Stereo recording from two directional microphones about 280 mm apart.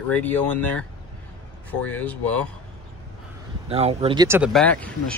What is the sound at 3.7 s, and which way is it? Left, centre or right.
Speech, right.